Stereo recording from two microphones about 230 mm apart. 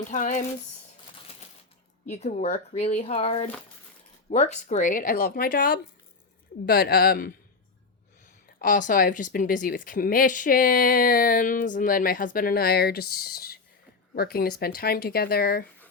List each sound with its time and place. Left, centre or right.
0.1 s speech: left
2.0 s speech: left
8.5 s speech: left